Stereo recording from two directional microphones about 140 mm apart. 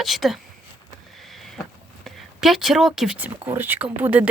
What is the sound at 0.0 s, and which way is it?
Speech, centre (ahead or behind).